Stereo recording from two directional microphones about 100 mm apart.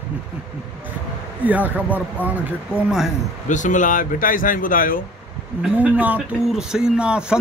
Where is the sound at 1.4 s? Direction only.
15° right (ahead or behind).